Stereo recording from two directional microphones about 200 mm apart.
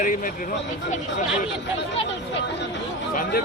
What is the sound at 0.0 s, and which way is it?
Speech, 40° left (ahead or behind).